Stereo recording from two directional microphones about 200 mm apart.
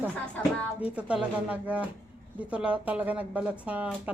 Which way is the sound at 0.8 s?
5° right (ahead or behind).